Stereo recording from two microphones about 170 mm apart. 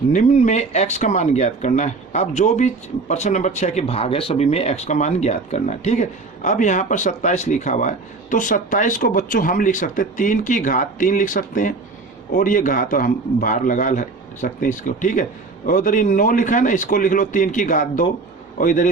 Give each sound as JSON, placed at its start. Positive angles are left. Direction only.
{"t": 0.1, "sound": "speech", "side_deg": 45}